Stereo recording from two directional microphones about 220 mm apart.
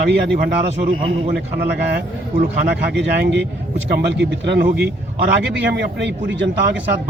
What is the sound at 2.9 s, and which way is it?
Speech, 50° right (ahead or behind).